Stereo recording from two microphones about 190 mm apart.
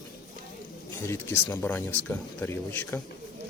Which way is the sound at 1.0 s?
15° left (ahead or behind).